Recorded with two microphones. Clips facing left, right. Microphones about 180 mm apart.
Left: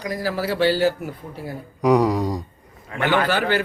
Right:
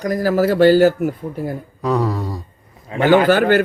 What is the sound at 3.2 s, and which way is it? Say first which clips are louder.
Speech: right 8 dB; 50° right (ahead or behind).